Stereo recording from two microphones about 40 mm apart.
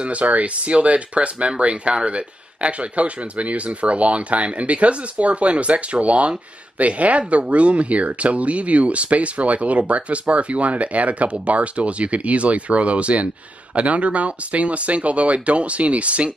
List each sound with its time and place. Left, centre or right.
0.0 s speech: right